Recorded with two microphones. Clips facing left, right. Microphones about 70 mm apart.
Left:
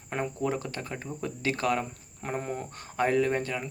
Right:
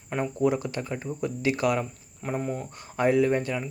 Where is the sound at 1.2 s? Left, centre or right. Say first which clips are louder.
Right 4 dB; centre.